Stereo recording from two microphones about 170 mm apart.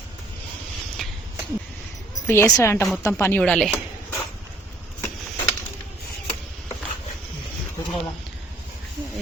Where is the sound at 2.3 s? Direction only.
15° left (ahead or behind).